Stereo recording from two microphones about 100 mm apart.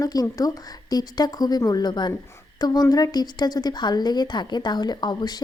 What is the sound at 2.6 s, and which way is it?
Speech, 40° left (ahead or behind).